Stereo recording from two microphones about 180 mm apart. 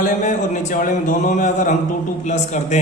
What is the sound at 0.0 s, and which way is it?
A man's voice, 45° left (ahead or behind).